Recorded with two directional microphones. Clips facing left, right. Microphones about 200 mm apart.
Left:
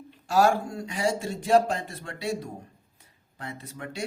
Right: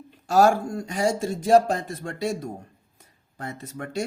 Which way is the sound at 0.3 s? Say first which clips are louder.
Right 3 dB; 45° right (ahead or behind).